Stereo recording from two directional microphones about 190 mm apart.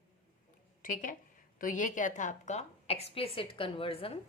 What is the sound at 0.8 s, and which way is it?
A woman's voice, 45° left (ahead or behind).